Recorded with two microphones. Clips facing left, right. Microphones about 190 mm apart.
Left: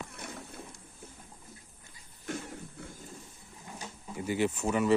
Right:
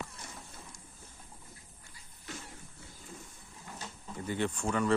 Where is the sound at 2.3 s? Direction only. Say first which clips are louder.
Left 8 dB; 50° left (ahead or behind).